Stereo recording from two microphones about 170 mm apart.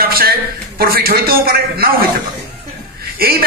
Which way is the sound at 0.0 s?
60° right (ahead or behind).